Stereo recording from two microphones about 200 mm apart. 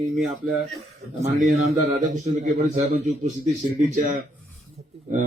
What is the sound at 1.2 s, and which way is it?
A man's voice, 35° right (ahead or behind).